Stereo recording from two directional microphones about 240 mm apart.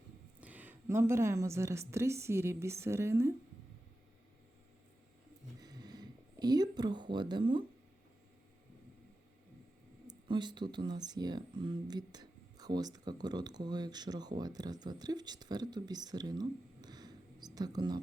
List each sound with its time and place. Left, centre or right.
0.3 s a woman's voice: centre
5.5 s a sound: centre
10.1 s speech: centre